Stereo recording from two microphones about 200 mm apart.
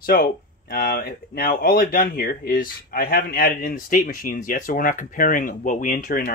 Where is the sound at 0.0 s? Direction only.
50° left (ahead or behind).